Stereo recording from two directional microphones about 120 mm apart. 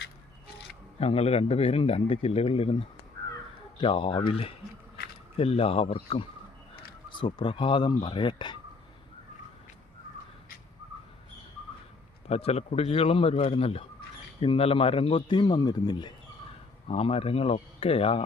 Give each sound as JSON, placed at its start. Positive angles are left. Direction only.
{"t": 0.9, "sound": "a man's voice", "side_deg": 60}
{"t": 12.3, "sound": "a man's voice", "side_deg": 60}
{"t": 16.9, "sound": "a man's voice", "side_deg": 55}